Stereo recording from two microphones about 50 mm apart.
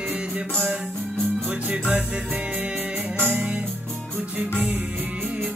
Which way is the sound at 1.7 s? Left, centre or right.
Right.